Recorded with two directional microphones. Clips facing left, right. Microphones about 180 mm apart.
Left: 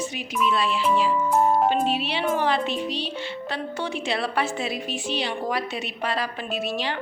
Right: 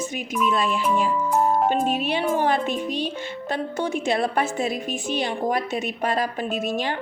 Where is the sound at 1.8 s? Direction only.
45° right (ahead or behind).